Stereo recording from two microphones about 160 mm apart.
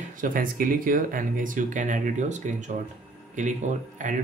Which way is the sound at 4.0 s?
50° right (ahead or behind).